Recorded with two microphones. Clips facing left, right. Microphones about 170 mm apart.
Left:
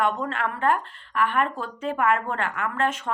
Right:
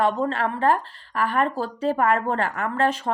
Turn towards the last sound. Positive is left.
turn(degrees=-35)  # may be behind; listen again after turning